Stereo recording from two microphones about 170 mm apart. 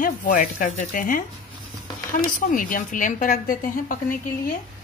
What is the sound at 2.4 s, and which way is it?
Speech, 50° left (ahead or behind).